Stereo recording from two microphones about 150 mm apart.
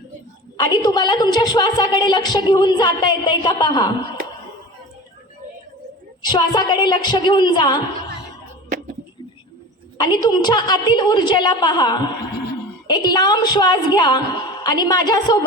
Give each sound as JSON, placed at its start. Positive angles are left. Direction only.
{"t": 0.5, "sound": "a woman's voice", "side_deg": 25}
{"t": 6.2, "sound": "a woman's voice", "side_deg": 30}
{"t": 10.0, "sound": "a woman's voice", "side_deg": 25}